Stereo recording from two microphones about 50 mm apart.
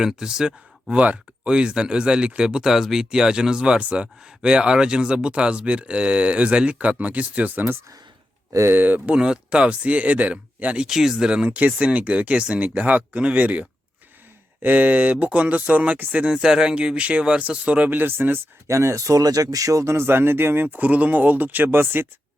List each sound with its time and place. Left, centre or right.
0.0 s speech: centre
0.9 s speech: right
1.5 s speech: centre
8.7 s speech: right
9.1 s speech: centre
10.8 s speech: centre
11.5 s speech: right
18.0 s speech: right
18.7 s speech: right
20.1 s speech: right